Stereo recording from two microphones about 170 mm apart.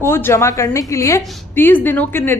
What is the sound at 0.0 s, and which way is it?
A woman's voice, 15° left (ahead or behind).